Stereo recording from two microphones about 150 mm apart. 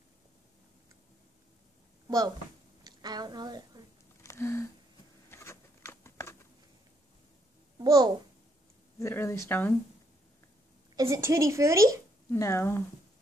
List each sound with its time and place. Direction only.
2.0 s a sound: 25° right (ahead or behind)
4.2 s a sound: 20° left (ahead or behind)
7.8 s a woman's voice: 30° right (ahead or behind)
9.0 s speech: 15° left (ahead or behind)
11.0 s a woman's voice: 20° right (ahead or behind)
12.3 s speech: 15° left (ahead or behind)